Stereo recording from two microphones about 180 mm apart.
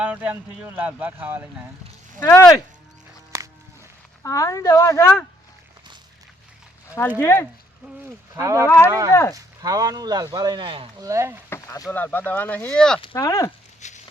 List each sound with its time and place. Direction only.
0.0 s speech: 5° right (ahead or behind)
2.2 s speech: 15° left (ahead or behind)
4.2 s speech: 15° left (ahead or behind)
7.2 s speech: 15° left (ahead or behind)
8.4 s speech: 15° right (ahead or behind)
8.6 s speech: 15° left (ahead or behind)
8.9 s speech: 20° right (ahead or behind)
11.1 s speech: 15° right (ahead or behind)
11.4 s speech: 15° left (ahead or behind)
13.1 s speech: 20° left (ahead or behind)
13.8 s a sound: 40° left (ahead or behind)